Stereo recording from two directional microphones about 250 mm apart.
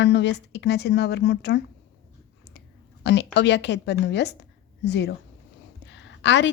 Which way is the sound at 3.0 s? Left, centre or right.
Left.